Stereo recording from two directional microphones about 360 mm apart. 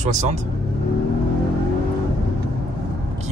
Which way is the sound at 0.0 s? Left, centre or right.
Centre.